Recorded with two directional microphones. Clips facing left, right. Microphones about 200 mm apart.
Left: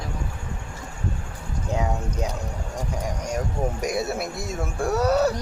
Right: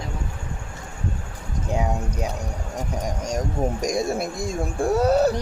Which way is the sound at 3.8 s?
5° left (ahead or behind).